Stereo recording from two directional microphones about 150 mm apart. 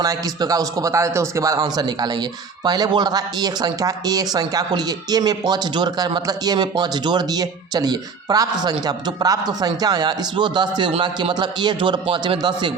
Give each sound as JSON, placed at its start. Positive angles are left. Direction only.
{"t": 0.0, "sound": "speech", "side_deg": -25}